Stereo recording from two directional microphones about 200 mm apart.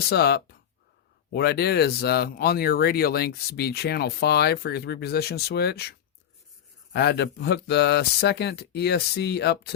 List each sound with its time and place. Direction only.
0.1 s speech: 55° left (ahead or behind)
6.9 s speech: 55° left (ahead or behind)